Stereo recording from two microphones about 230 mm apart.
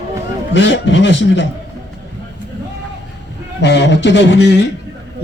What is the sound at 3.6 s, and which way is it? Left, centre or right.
A man's voice, left.